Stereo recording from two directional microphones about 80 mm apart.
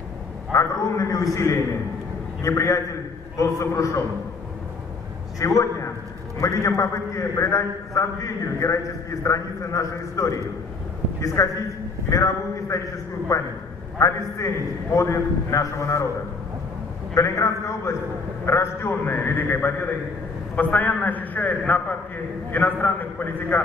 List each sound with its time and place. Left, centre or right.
0.5 s a man's voice: left
5.4 s a man's voice: left
17.1 s a man's voice: left